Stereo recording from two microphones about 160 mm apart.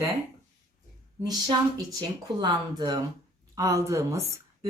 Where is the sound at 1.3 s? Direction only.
25° right (ahead or behind).